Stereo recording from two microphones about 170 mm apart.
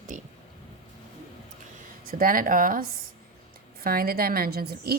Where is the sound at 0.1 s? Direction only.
50° right (ahead or behind).